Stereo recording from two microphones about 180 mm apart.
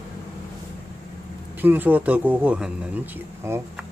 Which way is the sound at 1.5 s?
10° right (ahead or behind).